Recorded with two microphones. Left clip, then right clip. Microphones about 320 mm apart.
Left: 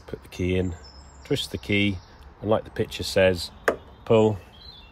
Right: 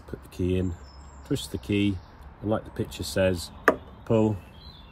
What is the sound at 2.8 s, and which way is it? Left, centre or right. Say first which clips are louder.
Speech: left 5 dB; centre.